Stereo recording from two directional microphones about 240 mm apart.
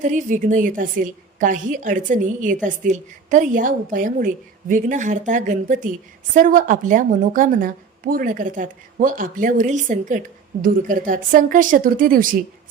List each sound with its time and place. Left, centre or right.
0.0 s a woman's voice: right